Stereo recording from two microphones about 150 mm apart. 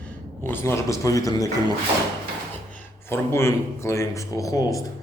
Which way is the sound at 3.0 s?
15° left (ahead or behind).